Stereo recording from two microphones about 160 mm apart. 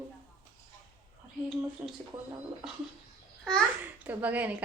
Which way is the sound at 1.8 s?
10° right (ahead or behind).